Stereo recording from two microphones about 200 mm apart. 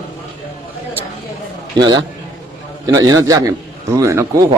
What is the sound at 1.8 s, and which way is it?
A man's voice, 20° right (ahead or behind).